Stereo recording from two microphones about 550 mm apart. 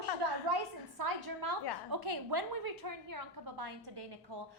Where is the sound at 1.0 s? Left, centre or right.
Right.